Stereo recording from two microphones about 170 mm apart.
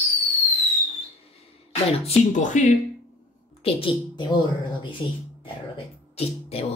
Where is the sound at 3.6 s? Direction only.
30° left (ahead or behind).